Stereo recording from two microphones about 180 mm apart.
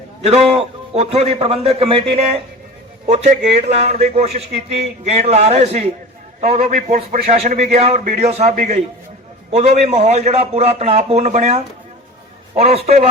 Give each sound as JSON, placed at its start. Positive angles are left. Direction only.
{"t": 0.2, "sound": "a man's voice", "side_deg": -35}